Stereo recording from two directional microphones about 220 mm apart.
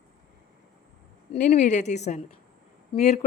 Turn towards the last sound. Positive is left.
turn(degrees=30)  # may be behind; listen again after turning